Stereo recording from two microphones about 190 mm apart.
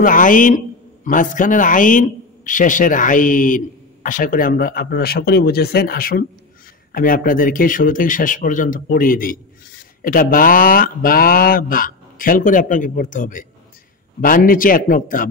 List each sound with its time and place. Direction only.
0.0 s a man's voice: 45° left (ahead or behind)